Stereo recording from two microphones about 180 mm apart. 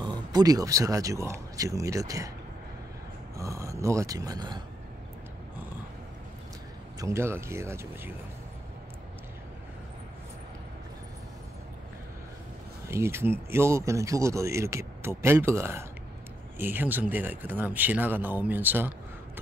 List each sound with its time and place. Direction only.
0.0 s speech: 25° right (ahead or behind)
3.3 s speech: 15° right (ahead or behind)
7.0 s speech: 15° right (ahead or behind)
12.8 s speech: 15° right (ahead or behind)